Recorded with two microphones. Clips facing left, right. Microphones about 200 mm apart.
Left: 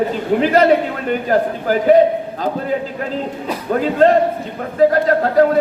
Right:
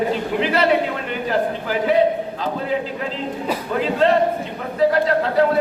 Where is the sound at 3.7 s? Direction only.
45° left (ahead or behind).